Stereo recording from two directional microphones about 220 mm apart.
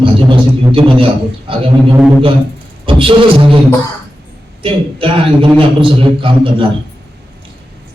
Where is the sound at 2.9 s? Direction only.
25° right (ahead or behind).